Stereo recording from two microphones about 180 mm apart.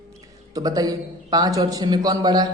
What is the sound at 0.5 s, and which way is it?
A man's voice, 20° right (ahead or behind).